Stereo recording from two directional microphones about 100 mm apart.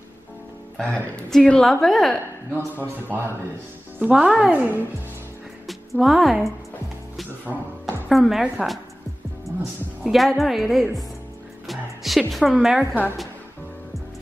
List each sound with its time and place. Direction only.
1.1 s a woman's voice: 10° left (ahead or behind)
2.8 s speech: 20° right (ahead or behind)
4.0 s a woman's voice: 10° right (ahead or behind)
5.7 s speech: centre (ahead or behind)
8.1 s a woman's voice: centre (ahead or behind)
11.6 s music: centre (ahead or behind)
12.6 s a woman's voice: 10° right (ahead or behind)